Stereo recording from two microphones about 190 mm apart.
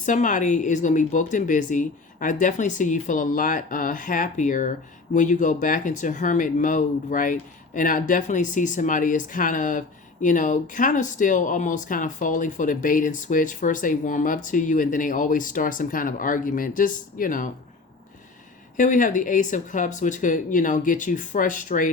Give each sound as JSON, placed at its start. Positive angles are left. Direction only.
{"t": 0.0, "sound": "speech", "side_deg": 40}
{"t": 18.8, "sound": "speech", "side_deg": 45}